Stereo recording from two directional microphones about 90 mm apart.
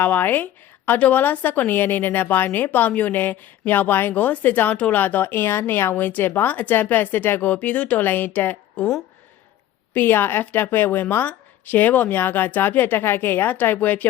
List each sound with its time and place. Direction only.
0.0 s a woman's voice: 20° left (ahead or behind)
9.9 s a woman's voice: 25° left (ahead or behind)